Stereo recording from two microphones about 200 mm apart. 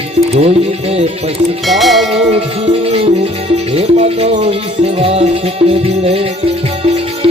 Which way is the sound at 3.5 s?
30° right (ahead or behind).